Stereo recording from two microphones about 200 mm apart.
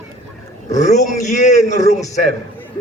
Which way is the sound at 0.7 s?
35° left (ahead or behind).